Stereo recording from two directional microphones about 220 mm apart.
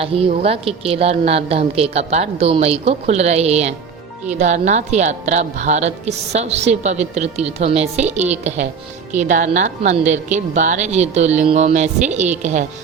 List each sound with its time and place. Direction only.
0.0 s a woman's voice: 25° right (ahead or behind)